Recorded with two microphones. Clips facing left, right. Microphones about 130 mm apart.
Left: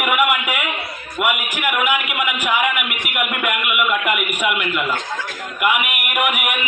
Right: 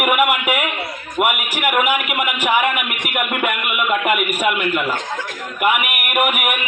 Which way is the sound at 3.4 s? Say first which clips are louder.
Even; 40° right (ahead or behind).